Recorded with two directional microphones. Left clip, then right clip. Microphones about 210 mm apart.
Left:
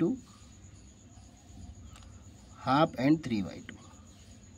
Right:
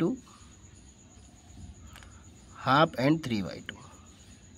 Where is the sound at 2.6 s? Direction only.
10° right (ahead or behind).